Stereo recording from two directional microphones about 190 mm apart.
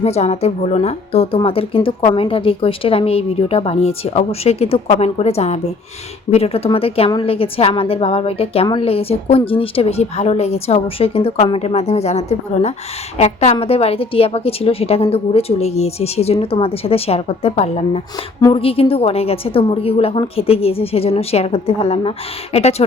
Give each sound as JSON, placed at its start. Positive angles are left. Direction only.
{"t": 0.0, "sound": "a woman's voice", "side_deg": 35}
{"t": 18.3, "sound": "speech", "side_deg": 20}
{"t": 18.6, "sound": "a woman's voice", "side_deg": 30}